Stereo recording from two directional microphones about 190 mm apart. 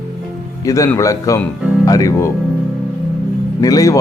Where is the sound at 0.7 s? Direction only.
15° left (ahead or behind).